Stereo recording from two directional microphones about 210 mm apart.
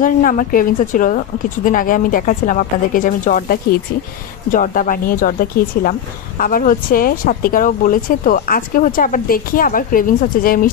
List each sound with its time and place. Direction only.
0.0 s speech: 40° left (ahead or behind)